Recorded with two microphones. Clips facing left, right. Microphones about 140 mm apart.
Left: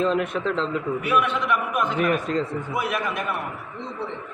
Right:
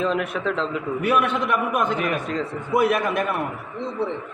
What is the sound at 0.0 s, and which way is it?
Speech, 5° right (ahead or behind).